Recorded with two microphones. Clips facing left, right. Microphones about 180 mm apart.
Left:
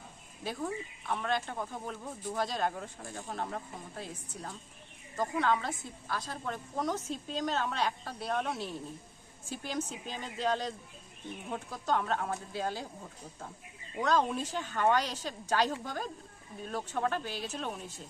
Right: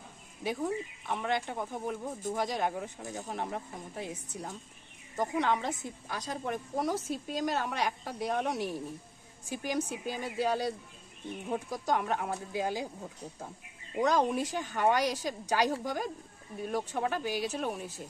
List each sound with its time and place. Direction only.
0.4 s speech: 15° right (ahead or behind)
13.9 s speech: 15° right (ahead or behind)